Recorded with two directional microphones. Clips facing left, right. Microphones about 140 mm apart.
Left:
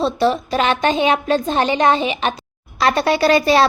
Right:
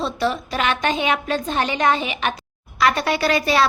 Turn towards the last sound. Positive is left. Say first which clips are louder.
# left 5 dB
turn(degrees=30)  # may be behind; listen again after turning